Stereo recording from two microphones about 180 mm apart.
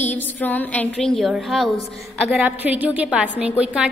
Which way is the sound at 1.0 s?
Centre (ahead or behind).